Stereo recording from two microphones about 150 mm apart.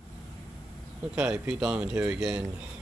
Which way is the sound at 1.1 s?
5° right (ahead or behind).